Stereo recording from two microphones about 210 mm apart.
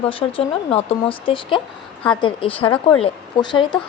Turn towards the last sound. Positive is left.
turn(degrees=20)  # may be behind; listen again after turning